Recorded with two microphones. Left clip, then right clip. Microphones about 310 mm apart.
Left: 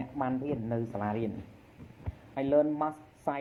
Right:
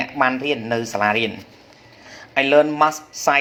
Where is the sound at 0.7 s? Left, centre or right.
Right.